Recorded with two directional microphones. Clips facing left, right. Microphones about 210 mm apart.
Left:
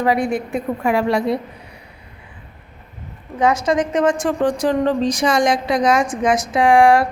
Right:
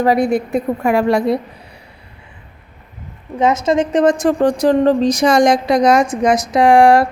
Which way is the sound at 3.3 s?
20° right (ahead or behind).